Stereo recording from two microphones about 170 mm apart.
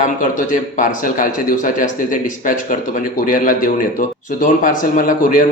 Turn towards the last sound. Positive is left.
turn(degrees=55)  # may be behind; listen again after turning